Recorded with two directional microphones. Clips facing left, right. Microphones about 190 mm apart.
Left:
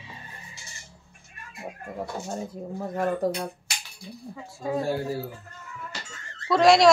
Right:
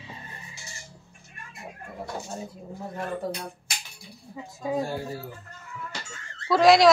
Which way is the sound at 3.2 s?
40° left (ahead or behind).